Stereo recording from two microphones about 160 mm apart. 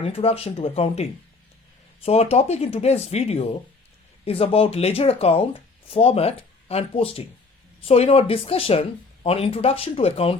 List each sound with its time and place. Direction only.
0.0 s speech: 35° left (ahead or behind)
2.0 s speech: 40° left (ahead or behind)